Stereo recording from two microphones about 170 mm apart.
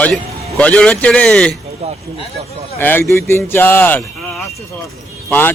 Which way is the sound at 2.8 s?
10° left (ahead or behind).